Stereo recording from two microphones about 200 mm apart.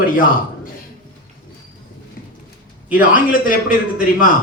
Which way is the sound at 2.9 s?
45° left (ahead or behind).